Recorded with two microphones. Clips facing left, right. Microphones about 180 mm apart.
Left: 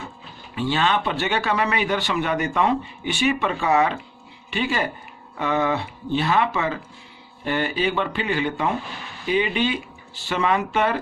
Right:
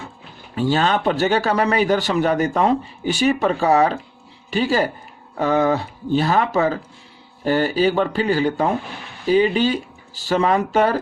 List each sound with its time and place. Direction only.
0.5 s a man's voice: 40° right (ahead or behind)